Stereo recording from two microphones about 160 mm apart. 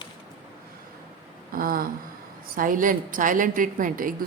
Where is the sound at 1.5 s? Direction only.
65° right (ahead or behind).